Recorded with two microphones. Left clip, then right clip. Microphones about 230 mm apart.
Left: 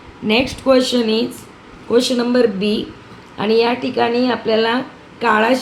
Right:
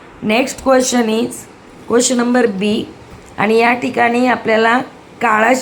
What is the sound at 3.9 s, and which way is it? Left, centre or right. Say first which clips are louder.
A woman's voice: right 1 dB; centre.